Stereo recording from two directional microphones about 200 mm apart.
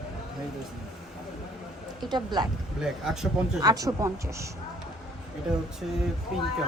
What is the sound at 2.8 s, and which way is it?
Speech, 5° right (ahead or behind).